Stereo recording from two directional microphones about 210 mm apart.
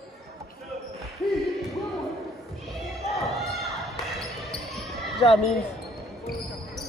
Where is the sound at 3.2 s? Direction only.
Centre (ahead or behind).